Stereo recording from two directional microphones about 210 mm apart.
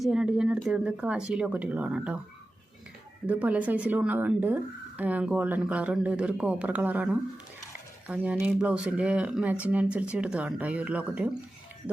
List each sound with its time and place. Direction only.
0.0 s speech: 5° right (ahead or behind)
3.2 s speech: 5° right (ahead or behind)